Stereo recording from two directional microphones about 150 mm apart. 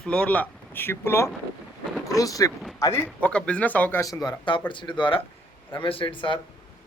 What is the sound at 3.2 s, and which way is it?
Speech, 10° left (ahead or behind).